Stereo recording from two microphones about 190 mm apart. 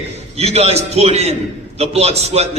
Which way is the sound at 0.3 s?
35° right (ahead or behind).